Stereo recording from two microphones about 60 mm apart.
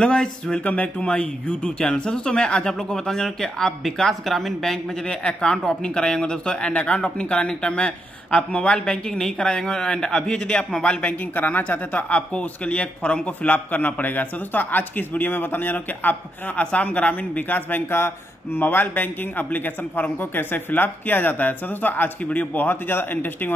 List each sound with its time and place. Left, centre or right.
0.0 s speech: centre
5.0 s speech: centre
11.3 s speech: left